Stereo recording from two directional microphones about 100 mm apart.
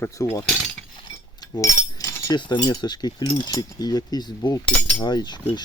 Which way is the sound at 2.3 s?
45° left (ahead or behind).